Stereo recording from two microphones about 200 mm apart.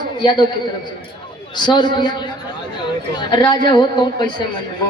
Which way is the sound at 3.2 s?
20° left (ahead or behind).